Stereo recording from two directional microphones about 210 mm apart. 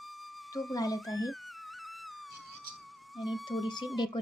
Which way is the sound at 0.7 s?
15° left (ahead or behind).